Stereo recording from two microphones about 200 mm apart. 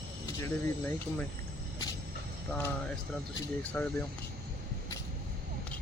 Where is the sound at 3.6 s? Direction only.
5° left (ahead or behind).